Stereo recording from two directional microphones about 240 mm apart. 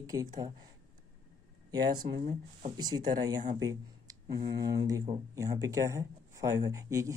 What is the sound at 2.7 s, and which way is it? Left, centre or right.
Speech, centre.